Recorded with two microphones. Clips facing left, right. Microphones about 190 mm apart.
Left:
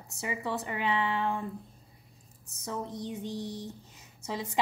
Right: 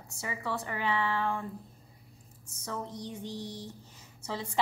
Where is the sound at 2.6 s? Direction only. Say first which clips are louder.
Left 2 dB; 15° left (ahead or behind).